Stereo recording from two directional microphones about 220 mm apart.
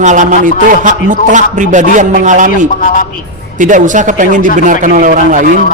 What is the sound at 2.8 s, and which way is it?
Speech, 40° left (ahead or behind).